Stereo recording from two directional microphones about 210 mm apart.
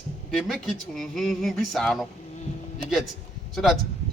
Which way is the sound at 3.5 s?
Centre (ahead or behind).